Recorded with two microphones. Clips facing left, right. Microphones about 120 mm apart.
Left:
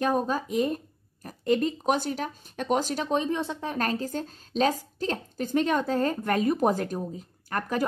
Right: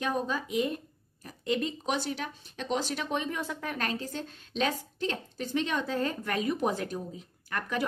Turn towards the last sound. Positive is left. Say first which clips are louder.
# left 4 dB
turn(degrees=40)  # may be behind; listen again after turning